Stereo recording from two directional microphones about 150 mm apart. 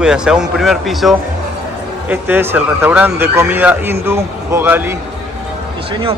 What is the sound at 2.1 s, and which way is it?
Speech, 15° right (ahead or behind).